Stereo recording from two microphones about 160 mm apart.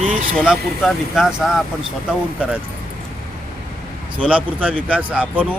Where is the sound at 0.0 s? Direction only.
55° right (ahead or behind).